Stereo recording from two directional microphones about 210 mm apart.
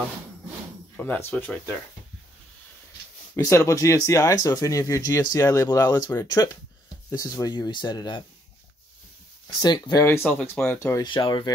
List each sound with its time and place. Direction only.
0.9 s speech: 5° left (ahead or behind)
3.3 s speech: 15° left (ahead or behind)
9.6 s speech: 20° left (ahead or behind)
11.1 s speech: 20° left (ahead or behind)